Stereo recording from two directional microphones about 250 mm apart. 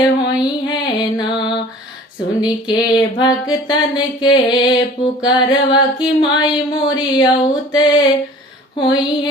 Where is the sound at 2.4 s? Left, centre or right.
Centre.